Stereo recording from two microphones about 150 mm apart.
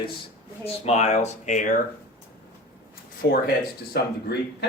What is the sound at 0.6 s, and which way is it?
Speech, 45° left (ahead or behind).